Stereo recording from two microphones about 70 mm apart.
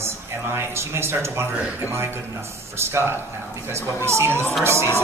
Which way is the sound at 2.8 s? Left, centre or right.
Right.